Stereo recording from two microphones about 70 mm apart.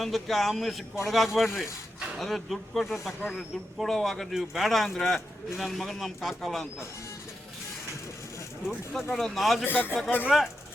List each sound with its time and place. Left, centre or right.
0.0 s speech: centre
9.0 s speech: centre
9.6 s a man's voice: left
10.2 s speech: centre